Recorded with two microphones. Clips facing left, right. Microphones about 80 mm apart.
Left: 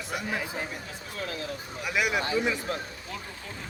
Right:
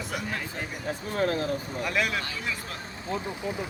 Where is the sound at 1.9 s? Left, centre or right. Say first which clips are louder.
Left 1 dB; centre.